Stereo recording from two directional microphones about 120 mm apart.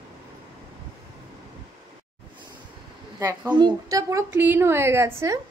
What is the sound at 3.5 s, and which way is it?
Speech, 35° right (ahead or behind).